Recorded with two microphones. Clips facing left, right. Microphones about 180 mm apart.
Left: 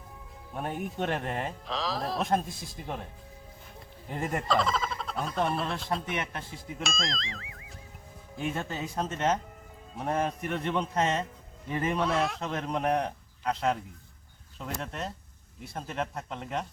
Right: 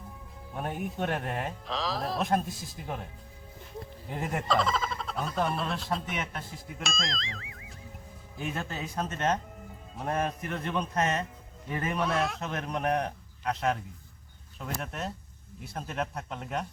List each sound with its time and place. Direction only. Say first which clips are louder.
0.5 s speech: even; centre (ahead or behind)
4.1 s speech: left 1 dB; centre (ahead or behind)
10.8 s a man's voice: right 1 dB; 25° left (ahead or behind)
11.9 s speech: left 1 dB; centre (ahead or behind)